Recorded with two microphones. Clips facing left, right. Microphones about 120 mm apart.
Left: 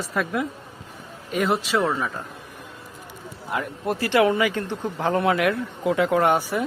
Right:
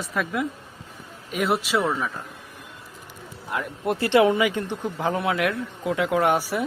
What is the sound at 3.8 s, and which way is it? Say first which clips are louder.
Speech: right 1 dB; 25° right (ahead or behind).